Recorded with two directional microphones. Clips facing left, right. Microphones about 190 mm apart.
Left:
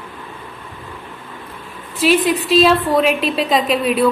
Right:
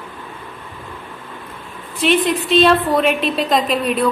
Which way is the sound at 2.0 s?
5° left (ahead or behind).